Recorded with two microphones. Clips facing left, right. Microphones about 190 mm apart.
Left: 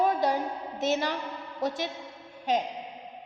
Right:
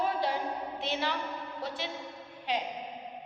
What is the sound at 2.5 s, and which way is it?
Speech, 45° left (ahead or behind).